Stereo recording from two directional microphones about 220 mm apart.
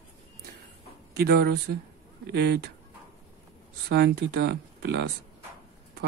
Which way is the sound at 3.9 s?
45° right (ahead or behind).